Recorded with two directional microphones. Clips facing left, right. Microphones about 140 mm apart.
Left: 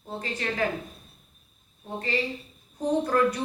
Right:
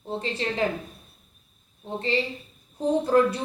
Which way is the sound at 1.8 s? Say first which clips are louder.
Right 3 dB; 25° right (ahead or behind).